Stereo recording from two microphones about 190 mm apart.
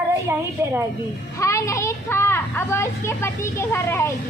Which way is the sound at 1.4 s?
15° left (ahead or behind).